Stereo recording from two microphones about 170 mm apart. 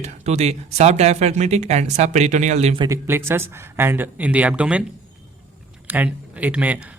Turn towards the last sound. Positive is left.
turn(degrees=-10)  # may be behind; listen again after turning